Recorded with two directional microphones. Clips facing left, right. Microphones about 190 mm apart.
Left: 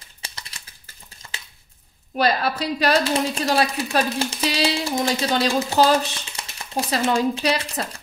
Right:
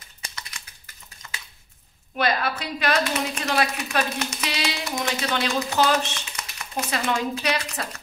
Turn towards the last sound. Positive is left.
turn(degrees=30)  # may be behind; listen again after turning